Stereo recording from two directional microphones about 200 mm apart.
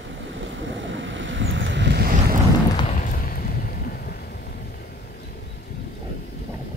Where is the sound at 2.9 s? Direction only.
40° left (ahead or behind).